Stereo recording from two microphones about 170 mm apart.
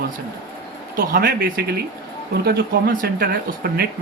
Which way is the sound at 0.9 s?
55° right (ahead or behind).